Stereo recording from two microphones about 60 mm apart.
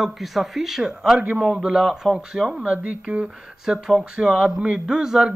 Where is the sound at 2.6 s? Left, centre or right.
Right.